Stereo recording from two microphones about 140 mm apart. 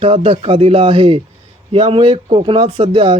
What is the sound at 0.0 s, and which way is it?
A man's voice, 40° right (ahead or behind).